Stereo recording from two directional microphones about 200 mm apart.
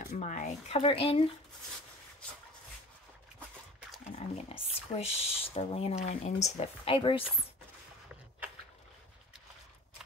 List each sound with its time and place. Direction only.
0.2 s speech: 35° left (ahead or behind)
4.1 s speech: 30° left (ahead or behind)